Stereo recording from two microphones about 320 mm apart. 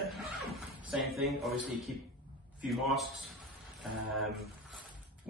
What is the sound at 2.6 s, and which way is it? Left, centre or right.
Speech, centre.